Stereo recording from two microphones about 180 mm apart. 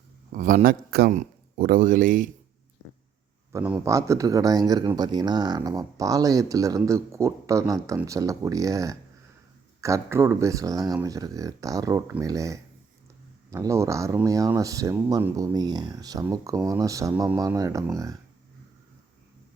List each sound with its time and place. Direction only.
0.3 s a man's voice: 50° right (ahead or behind)
3.5 s speech: 10° right (ahead or behind)